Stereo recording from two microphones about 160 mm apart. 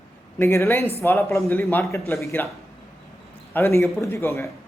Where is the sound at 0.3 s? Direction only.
15° left (ahead or behind).